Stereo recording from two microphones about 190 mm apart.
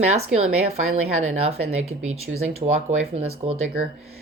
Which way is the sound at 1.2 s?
35° right (ahead or behind).